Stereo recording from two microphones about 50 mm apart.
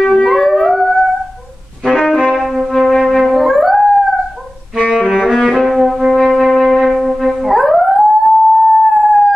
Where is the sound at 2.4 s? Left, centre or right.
Centre.